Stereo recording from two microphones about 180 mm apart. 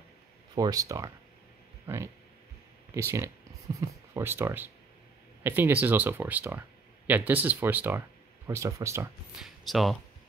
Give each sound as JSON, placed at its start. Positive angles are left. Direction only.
{"t": 0.6, "sound": "speech", "side_deg": -20}
{"t": 9.3, "sound": "speech", "side_deg": 0}